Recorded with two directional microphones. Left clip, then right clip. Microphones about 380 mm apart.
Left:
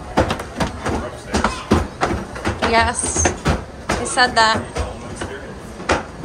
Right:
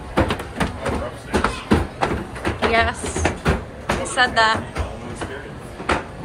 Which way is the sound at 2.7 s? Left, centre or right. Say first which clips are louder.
Left 3 dB; centre.